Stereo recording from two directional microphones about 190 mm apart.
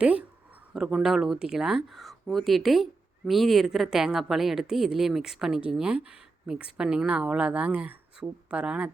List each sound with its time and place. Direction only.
0.0 s speech: 5° right (ahead or behind)